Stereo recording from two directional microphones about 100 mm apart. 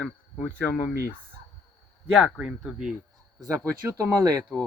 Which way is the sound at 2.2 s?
5° right (ahead or behind).